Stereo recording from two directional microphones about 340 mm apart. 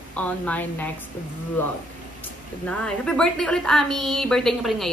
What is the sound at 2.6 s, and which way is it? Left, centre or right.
Speech, centre.